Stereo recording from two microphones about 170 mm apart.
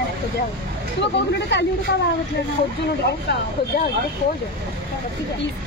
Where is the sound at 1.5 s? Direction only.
90° left.